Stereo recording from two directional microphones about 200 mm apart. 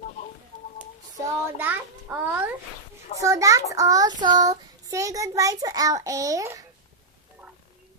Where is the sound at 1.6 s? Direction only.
10° right (ahead or behind).